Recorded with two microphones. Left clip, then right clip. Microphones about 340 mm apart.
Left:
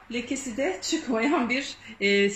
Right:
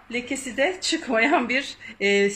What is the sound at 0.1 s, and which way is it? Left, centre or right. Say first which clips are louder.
Speech: right 3 dB; right.